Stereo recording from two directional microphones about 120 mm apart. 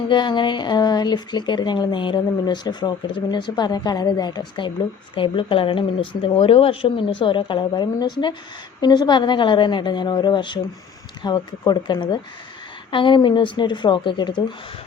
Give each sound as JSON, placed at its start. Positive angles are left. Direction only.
{"t": 0.1, "sound": "speech", "side_deg": 40}